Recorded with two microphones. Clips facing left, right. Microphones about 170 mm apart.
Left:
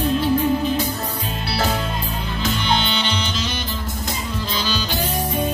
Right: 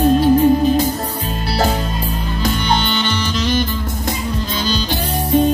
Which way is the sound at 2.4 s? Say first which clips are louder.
Right 3 dB; 45° right (ahead or behind).